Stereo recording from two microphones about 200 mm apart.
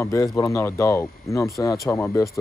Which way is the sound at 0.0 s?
15° left (ahead or behind).